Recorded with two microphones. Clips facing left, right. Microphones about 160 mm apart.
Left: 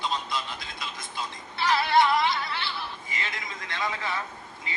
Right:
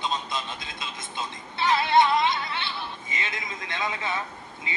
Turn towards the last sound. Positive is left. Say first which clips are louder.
# right 2 dB
turn(degrees=-20)  # may be behind; listen again after turning